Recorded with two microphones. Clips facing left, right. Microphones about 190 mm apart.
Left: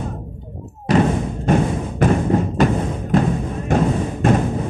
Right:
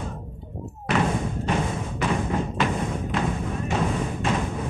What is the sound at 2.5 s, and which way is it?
Thump, 40° left (ahead or behind).